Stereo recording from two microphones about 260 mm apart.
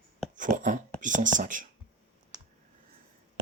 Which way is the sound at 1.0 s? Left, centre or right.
Right.